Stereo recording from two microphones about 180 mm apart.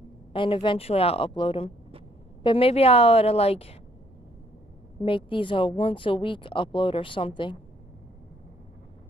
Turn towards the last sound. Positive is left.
turn(degrees=30)  # may be behind; listen again after turning